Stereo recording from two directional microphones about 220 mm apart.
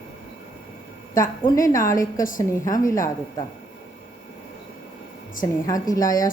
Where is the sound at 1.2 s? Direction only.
35° left (ahead or behind).